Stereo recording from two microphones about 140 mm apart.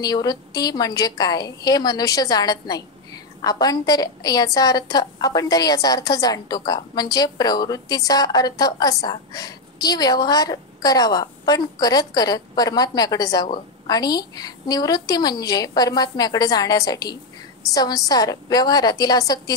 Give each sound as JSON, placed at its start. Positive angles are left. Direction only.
{"t": 0.0, "sound": "a woman's voice", "side_deg": 30}